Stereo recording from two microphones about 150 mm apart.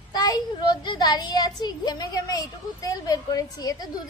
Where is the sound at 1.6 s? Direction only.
25° left (ahead or behind).